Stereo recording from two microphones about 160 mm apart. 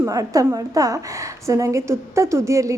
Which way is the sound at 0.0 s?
20° right (ahead or behind).